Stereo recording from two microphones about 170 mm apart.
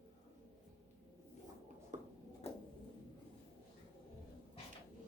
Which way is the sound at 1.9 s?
50° right (ahead or behind).